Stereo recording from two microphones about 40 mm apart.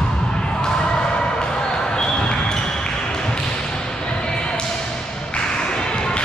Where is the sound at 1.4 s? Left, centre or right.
Centre.